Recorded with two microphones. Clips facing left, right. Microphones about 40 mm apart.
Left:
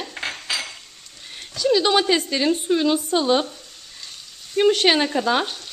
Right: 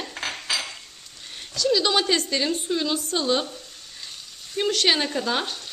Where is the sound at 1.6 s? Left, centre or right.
Centre.